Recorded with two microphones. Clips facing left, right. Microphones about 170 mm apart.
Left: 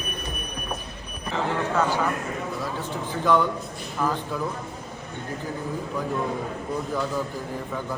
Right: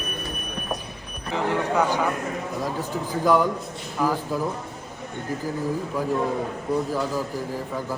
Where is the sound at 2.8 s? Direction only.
40° right (ahead or behind).